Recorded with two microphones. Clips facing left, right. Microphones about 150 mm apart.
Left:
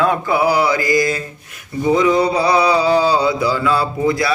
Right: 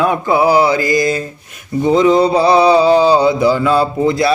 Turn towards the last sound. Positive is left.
turn(degrees=-25)  # may be behind; listen again after turning